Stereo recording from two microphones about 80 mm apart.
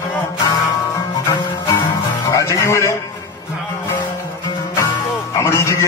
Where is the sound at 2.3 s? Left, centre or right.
Left.